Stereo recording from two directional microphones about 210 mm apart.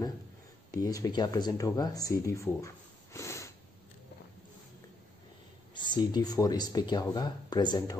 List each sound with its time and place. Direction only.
0.7 s speech: 15° left (ahead or behind)
5.8 s speech: 20° left (ahead or behind)